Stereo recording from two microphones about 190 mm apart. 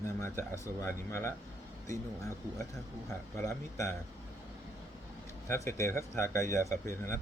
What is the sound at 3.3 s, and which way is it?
Speech, 15° left (ahead or behind).